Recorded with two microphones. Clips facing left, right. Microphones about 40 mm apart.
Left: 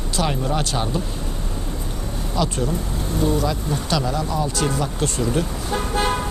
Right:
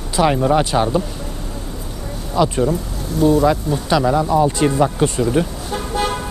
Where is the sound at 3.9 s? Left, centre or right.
Right.